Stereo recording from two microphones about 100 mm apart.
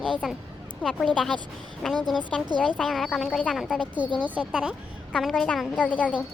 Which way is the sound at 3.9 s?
50° right (ahead or behind).